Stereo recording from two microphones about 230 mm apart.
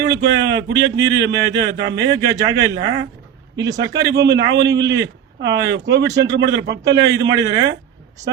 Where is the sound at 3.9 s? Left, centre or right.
Right.